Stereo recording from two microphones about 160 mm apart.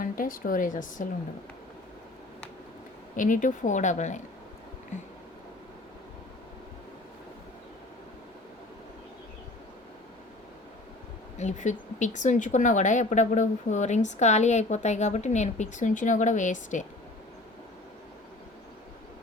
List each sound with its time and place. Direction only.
0.0 s speech: 60° left (ahead or behind)
3.2 s speech: 55° left (ahead or behind)
11.3 s speech: 50° left (ahead or behind)